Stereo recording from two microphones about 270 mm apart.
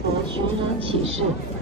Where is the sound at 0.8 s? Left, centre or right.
Right.